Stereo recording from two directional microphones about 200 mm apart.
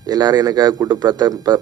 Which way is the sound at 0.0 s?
20° right (ahead or behind).